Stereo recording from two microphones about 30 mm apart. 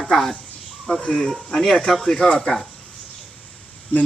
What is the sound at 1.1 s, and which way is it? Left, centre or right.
Speech, centre.